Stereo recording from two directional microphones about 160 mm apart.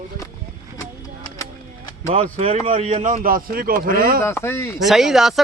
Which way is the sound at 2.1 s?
45° right (ahead or behind).